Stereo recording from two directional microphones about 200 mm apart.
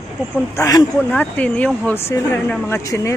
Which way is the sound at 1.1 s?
5° left (ahead or behind).